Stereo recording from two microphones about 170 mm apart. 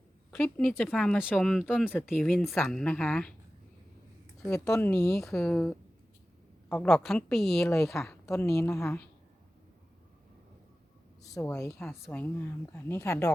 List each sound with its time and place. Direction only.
0.3 s speech: 5° left (ahead or behind)
4.5 s a woman's voice: 15° left (ahead or behind)
5.1 s speech: centre (ahead or behind)
8.3 s a woman's voice: 15° left (ahead or behind)
11.2 s a woman's voice: 20° left (ahead or behind)